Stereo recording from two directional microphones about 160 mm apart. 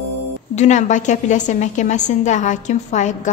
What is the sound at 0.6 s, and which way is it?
A woman's voice, 45° left (ahead or behind).